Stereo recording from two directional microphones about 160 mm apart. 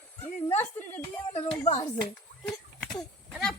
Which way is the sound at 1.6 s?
40° left (ahead or behind).